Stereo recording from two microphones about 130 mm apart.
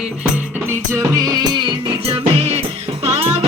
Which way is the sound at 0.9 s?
25° right (ahead or behind).